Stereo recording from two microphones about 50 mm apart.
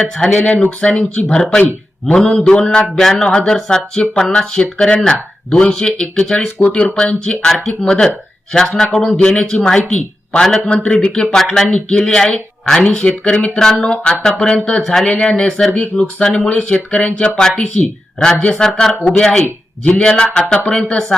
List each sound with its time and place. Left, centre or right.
0.0 s speech: centre
2.9 s speech: centre
11.3 s speech: centre
12.8 s speech: left
18.6 s speech: centre